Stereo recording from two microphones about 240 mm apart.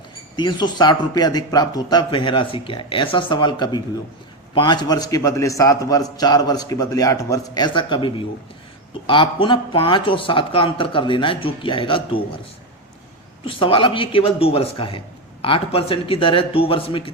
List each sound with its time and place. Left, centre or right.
0.3 s a man's voice: centre
13.4 s a man's voice: left